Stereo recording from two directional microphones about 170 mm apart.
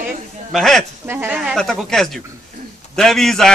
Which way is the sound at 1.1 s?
15° right (ahead or behind).